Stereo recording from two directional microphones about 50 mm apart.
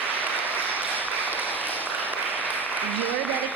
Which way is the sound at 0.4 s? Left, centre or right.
Right.